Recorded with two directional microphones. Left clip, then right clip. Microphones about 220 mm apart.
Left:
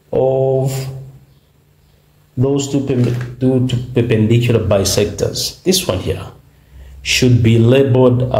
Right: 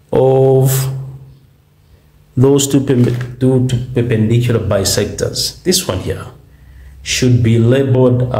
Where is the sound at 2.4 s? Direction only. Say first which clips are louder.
Right 5 dB; 30° right (ahead or behind).